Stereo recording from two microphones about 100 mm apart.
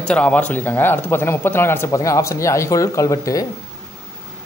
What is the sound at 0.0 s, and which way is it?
Speech, 10° left (ahead or behind).